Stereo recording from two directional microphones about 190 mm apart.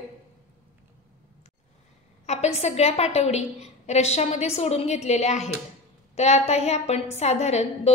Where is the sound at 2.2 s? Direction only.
35° left (ahead or behind).